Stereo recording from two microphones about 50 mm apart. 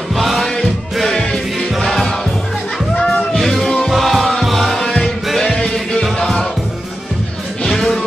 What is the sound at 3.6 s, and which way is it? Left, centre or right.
Music, centre.